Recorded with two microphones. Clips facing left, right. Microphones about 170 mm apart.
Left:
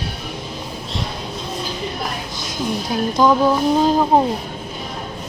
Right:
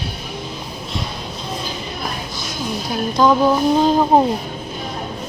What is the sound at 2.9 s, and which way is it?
Speech, 15° left (ahead or behind).